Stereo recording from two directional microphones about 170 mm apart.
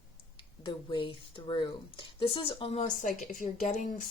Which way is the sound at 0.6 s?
30° left (ahead or behind).